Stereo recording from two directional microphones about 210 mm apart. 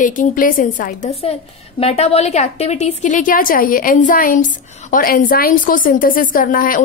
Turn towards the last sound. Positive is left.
turn(degrees=40)  # may be behind; listen again after turning